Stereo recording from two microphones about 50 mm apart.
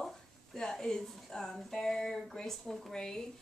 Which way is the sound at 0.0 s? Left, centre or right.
Centre.